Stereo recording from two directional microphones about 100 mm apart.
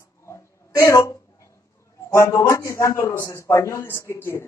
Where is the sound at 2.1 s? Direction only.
30° left (ahead or behind).